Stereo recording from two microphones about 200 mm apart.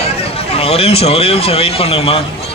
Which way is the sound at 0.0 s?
30° left (ahead or behind).